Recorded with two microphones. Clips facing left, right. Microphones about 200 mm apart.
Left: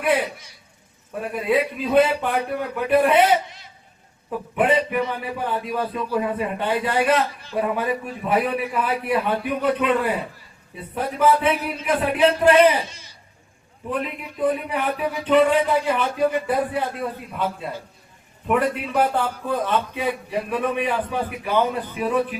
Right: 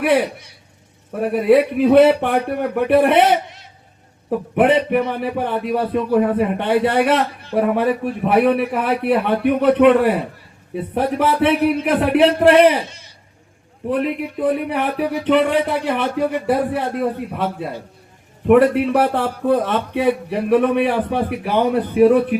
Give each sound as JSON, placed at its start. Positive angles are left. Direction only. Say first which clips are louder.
{"t": 0.0, "sound": "a man's voice", "louder": "right 5 dB", "side_deg": -70}
{"t": 4.5, "sound": "a man's voice", "louder": "right 5 dB", "side_deg": -65}